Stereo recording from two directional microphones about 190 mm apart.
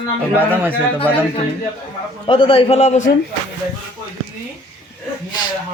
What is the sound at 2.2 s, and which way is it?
Speech, 25° left (ahead or behind).